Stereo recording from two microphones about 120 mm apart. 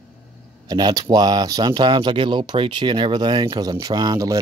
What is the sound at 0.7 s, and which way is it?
Speech, 35° right (ahead or behind).